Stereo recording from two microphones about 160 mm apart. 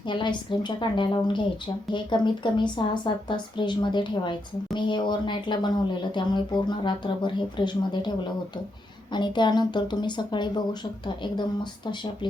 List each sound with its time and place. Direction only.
0.1 s speech: 30° left (ahead or behind)
9.1 s speech: 30° left (ahead or behind)